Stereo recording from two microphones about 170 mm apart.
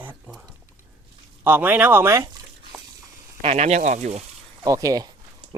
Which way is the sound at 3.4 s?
40° right (ahead or behind).